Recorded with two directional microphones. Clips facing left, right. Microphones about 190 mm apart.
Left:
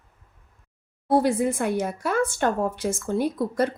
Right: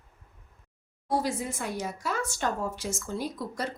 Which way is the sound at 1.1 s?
55° left (ahead or behind).